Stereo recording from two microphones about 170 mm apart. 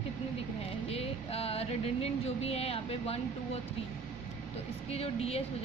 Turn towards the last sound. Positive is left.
turn(degrees=35)  # may be behind; listen again after turning